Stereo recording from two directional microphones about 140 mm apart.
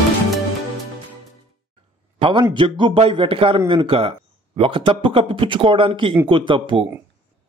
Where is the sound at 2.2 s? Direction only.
35° right (ahead or behind).